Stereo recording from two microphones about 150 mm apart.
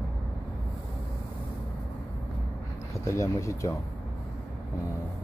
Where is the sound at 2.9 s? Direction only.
20° left (ahead or behind).